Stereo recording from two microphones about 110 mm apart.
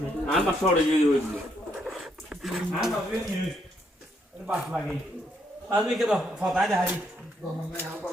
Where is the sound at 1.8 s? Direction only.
5° right (ahead or behind).